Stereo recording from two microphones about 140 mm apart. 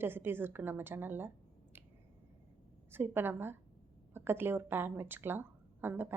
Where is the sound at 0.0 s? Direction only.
15° right (ahead or behind).